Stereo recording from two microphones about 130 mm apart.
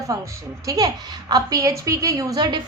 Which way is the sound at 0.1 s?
30° right (ahead or behind).